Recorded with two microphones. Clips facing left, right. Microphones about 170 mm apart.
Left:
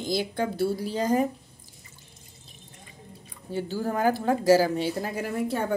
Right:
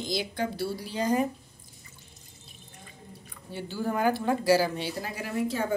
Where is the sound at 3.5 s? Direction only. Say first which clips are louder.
Left 3 dB; 40° left (ahead or behind).